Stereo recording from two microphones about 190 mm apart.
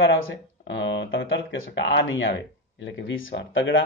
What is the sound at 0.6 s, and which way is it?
Speech, 70° left (ahead or behind).